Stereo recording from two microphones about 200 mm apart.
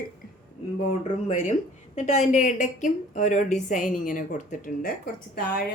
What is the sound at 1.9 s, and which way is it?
A woman's voice, 35° left (ahead or behind).